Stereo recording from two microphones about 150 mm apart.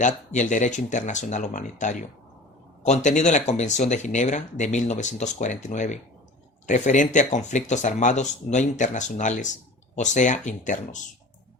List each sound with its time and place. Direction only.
0.0 s speech: 55° left (ahead or behind)